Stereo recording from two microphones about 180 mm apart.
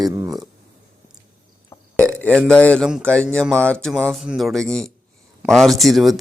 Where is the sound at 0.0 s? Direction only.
20° right (ahead or behind).